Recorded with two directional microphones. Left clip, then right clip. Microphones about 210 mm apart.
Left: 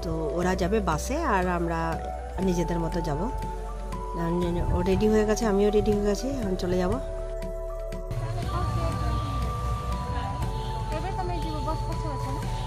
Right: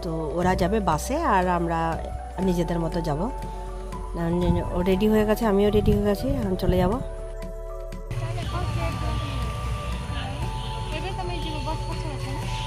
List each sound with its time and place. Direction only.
0.0 s speech: 5° right (ahead or behind)